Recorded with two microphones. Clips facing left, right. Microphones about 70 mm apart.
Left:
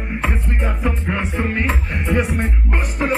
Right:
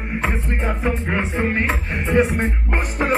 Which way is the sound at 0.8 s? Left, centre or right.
Right.